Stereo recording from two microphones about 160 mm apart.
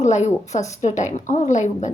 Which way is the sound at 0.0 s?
45° left (ahead or behind).